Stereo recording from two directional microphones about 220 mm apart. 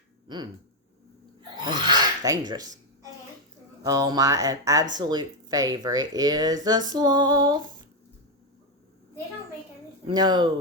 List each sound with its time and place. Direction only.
0.3 s speech: 20° right (ahead or behind)
1.4 s a sound: 20° right (ahead or behind)
3.8 s speech: 15° right (ahead or behind)
10.1 s speech: 20° right (ahead or behind)